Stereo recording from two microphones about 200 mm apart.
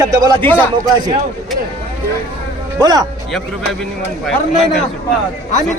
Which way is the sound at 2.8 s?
20° right (ahead or behind).